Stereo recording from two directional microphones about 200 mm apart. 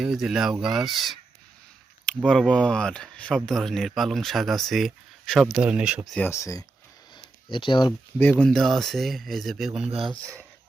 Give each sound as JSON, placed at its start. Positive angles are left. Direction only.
{"t": 0.0, "sound": "speech", "side_deg": 0}
{"t": 6.1, "sound": "speech", "side_deg": 10}
{"t": 8.2, "sound": "speech", "side_deg": 5}
{"t": 9.9, "sound": "speech", "side_deg": -25}